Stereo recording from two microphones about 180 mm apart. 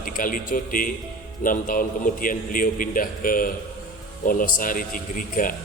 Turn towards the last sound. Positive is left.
turn(degrees=50)  # may be behind; listen again after turning